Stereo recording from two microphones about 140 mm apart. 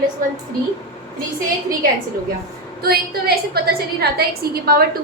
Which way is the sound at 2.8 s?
90° right.